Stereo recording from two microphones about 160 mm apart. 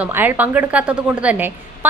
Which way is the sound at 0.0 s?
10° right (ahead or behind).